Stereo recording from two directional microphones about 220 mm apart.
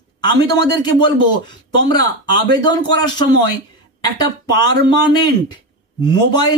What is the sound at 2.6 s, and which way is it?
Speech, 20° left (ahead or behind).